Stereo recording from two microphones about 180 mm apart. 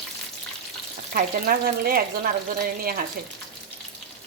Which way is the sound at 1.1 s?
55° right (ahead or behind).